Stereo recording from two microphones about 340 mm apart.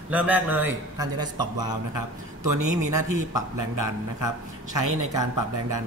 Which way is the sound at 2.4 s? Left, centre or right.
Right.